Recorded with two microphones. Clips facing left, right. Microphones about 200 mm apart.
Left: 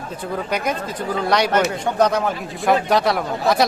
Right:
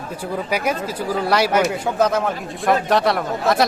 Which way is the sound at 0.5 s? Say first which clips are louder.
Right 2 dB; 5° right (ahead or behind).